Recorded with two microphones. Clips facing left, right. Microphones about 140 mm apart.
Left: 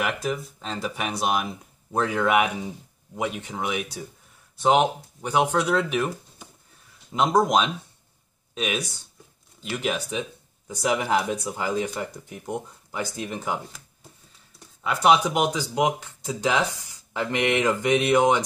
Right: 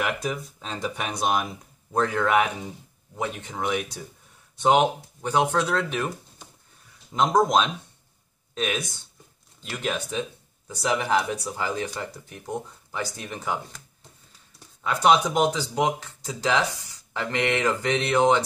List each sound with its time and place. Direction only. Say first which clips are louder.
0.0 s speech: left 1 dB; centre (ahead or behind)
5.2 s speech: left 1 dB; 10° left (ahead or behind)
14.8 s speech: even; 5° left (ahead or behind)